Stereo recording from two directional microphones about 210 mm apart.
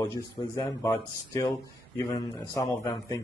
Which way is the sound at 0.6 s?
15° left (ahead or behind).